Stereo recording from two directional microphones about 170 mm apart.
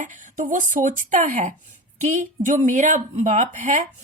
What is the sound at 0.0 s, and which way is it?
Speech, 50° right (ahead or behind).